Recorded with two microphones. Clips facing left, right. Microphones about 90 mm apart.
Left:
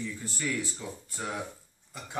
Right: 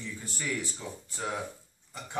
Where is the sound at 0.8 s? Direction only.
Centre (ahead or behind).